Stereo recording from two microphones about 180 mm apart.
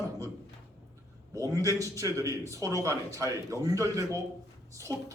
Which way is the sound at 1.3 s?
20° right (ahead or behind).